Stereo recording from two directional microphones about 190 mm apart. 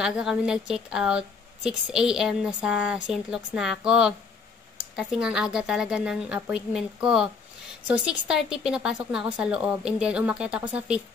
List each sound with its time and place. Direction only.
0.0 s a woman's voice: 5° right (ahead or behind)